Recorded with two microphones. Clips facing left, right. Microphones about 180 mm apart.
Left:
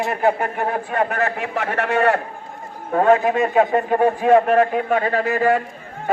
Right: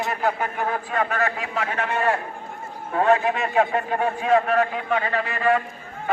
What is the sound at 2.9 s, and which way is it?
A man's voice, 45° left (ahead or behind).